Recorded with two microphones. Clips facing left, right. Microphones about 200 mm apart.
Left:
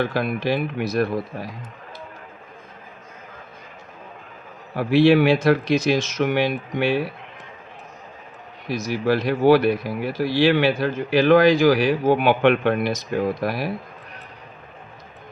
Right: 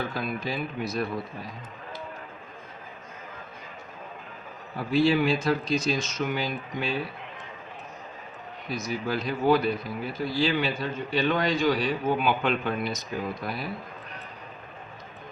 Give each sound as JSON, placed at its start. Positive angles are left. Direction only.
{"t": 0.0, "sound": "speech", "side_deg": 85}
{"t": 4.7, "sound": "speech", "side_deg": 85}
{"t": 8.6, "sound": "speech", "side_deg": 90}